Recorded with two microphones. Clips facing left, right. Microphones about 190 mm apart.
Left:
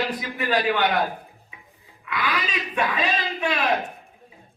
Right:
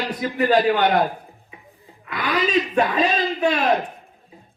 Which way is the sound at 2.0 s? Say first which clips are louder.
Right 5 dB; 40° right (ahead or behind).